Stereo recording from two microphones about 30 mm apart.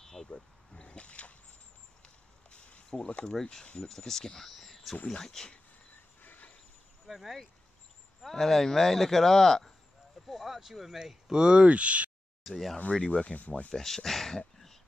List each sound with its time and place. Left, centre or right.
0.0 s a sound: centre
0.3 s a sound: left
2.9 s speech: left
4.4 s a sound: centre
5.2 s speech: centre
6.2 s a sound: left
7.1 s speech: centre
8.2 s speech: centre
10.4 s speech: centre
11.6 s speech: right
12.4 s speech: centre
12.9 s speech: left
13.4 s speech: left
13.7 s speech: centre